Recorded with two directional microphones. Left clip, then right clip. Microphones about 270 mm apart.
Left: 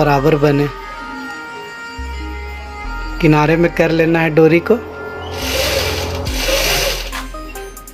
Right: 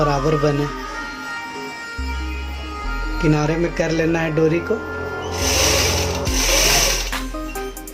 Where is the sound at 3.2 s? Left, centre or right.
Left.